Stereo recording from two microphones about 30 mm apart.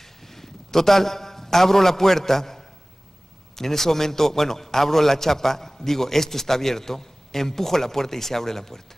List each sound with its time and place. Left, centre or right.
0.3 s a man's voice: centre